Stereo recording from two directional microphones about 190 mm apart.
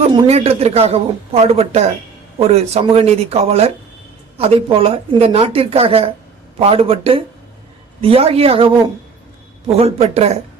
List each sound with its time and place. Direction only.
0.1 s a man's voice: 35° right (ahead or behind)
9.7 s speech: 35° right (ahead or behind)